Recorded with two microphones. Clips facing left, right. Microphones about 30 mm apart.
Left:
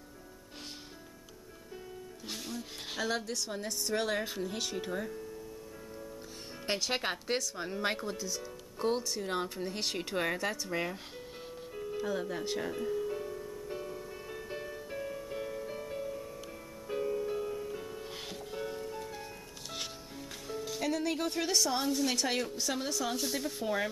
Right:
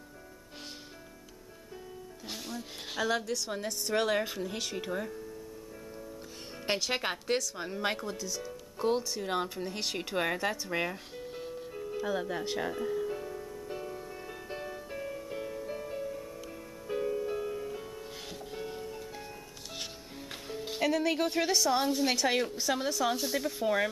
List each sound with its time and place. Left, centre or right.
2.2 s a woman's voice: centre
6.6 s a woman's voice: centre
11.1 s music: centre
20.8 s music: centre
21.5 s speech: centre